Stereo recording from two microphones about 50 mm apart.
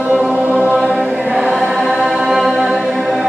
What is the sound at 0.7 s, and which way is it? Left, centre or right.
Choir, centre.